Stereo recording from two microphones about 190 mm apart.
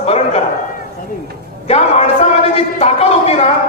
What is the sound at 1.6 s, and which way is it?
Speech, 35° left (ahead or behind).